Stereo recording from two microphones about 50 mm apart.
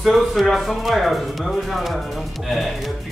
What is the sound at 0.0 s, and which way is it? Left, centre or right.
Speech, centre.